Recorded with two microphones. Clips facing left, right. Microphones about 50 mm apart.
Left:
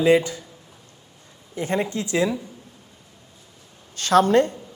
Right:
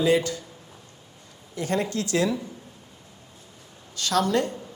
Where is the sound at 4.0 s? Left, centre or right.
Left.